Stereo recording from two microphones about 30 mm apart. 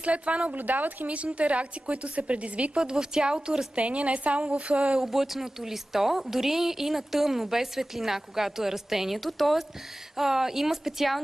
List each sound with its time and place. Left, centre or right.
0.0 s a woman's voice: right
0.6 s speech: right
1.0 s a woman's voice: right
2.8 s a woman's voice: right
3.7 s a woman's voice: right
5.0 s a woman's voice: centre
9.1 s a woman's voice: centre